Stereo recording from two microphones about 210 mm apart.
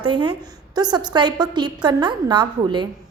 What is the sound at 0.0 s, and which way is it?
A woman's voice, 20° right (ahead or behind).